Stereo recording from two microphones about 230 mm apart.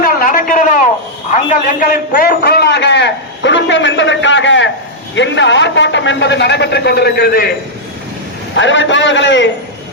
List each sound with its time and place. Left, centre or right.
0.0 s a sound: left
1.3 s a man's voice: left
8.5 s a man's voice: left